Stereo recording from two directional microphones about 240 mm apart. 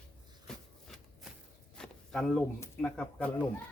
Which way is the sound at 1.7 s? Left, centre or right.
Centre.